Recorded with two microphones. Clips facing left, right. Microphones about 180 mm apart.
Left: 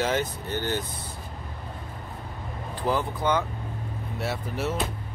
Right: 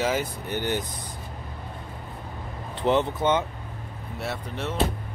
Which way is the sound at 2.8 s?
25° right (ahead or behind).